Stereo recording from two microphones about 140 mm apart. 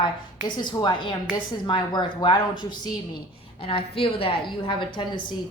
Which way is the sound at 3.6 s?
40° left (ahead or behind).